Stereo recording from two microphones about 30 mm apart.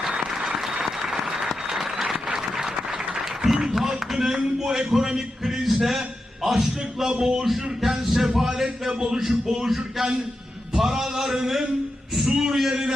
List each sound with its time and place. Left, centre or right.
0.1 s applause: right
0.5 s applause: centre
3.2 s a sound: centre
4.2 s a man's voice: centre
5.6 s a sound: centre
6.4 s a man's voice: centre
7.0 s speech: centre
7.4 s a man's voice: centre
8.9 s a man's voice: centre
12.1 s a sound: centre